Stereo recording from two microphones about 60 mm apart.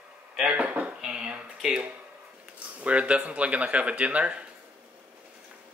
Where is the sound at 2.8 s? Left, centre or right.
Right.